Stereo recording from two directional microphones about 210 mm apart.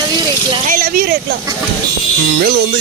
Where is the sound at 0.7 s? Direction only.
45° right (ahead or behind).